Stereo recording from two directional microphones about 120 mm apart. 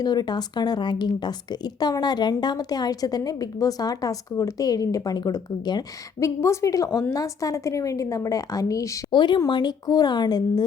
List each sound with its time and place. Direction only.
0.0 s a woman's voice: 35° left (ahead or behind)
9.1 s a woman's voice: 40° left (ahead or behind)